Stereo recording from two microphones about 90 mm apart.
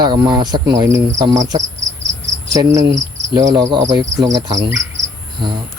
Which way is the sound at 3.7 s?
55° right (ahead or behind).